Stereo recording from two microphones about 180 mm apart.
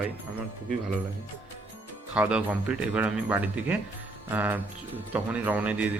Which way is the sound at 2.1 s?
5° right (ahead or behind).